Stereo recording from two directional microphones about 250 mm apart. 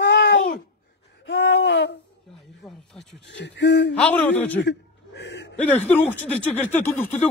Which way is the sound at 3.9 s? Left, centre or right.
Centre.